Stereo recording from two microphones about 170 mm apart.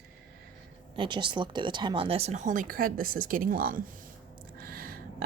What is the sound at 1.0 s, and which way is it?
Speech, 30° right (ahead or behind).